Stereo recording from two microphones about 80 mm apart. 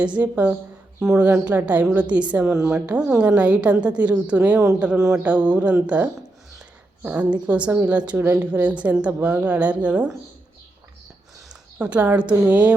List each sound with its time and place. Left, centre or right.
0.0 s a woman's voice: centre
11.8 s a woman's voice: centre